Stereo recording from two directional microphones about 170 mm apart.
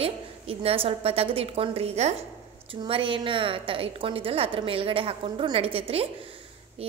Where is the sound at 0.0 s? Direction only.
35° right (ahead or behind).